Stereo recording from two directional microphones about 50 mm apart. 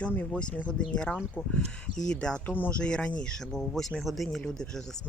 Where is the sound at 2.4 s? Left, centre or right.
Left.